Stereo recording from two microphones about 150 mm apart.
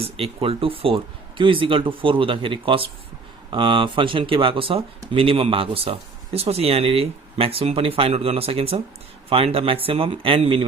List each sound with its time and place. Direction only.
0.0 s speech: 40° right (ahead or behind)